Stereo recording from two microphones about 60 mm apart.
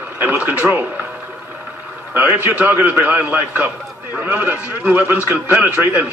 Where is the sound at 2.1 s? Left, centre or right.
Right.